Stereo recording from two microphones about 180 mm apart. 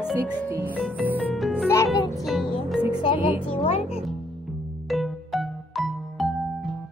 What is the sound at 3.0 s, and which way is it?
Music, 30° left (ahead or behind).